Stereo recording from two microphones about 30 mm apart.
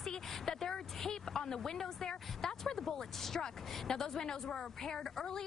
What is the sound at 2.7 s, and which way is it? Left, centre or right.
A woman's voice, centre.